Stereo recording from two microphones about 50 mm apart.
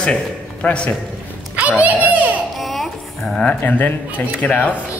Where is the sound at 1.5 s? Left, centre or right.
Right.